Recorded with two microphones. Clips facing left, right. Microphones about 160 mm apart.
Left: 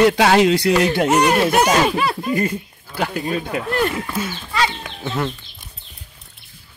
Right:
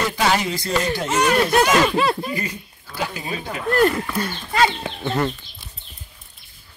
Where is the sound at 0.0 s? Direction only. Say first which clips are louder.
Left 8 dB; 70° left (ahead or behind).